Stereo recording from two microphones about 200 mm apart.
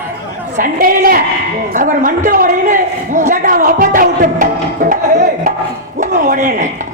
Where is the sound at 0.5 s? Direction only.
45° right (ahead or behind).